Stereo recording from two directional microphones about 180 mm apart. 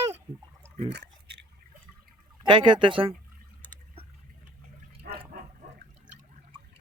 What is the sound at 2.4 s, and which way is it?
Speech, 25° right (ahead or behind).